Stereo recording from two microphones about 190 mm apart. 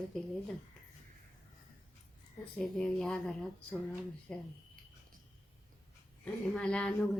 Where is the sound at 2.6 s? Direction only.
5° left (ahead or behind).